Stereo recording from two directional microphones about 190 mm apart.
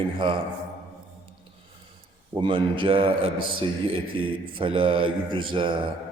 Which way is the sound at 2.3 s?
25° right (ahead or behind).